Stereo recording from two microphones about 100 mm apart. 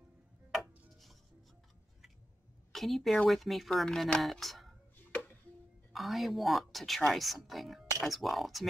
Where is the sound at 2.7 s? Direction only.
Centre (ahead or behind).